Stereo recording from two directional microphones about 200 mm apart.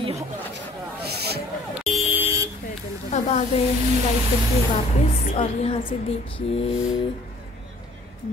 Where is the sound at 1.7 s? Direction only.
5° right (ahead or behind).